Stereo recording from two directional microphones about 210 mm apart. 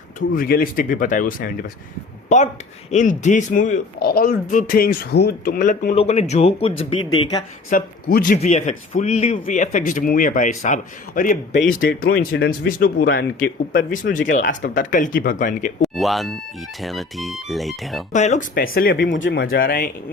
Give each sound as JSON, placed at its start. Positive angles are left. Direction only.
{"t": 0.2, "sound": "speech", "side_deg": 45}
{"t": 2.9, "sound": "speech", "side_deg": 35}
{"t": 7.7, "sound": "speech", "side_deg": 45}
{"t": 15.8, "sound": "speech", "side_deg": 0}
{"t": 18.1, "sound": "speech", "side_deg": 35}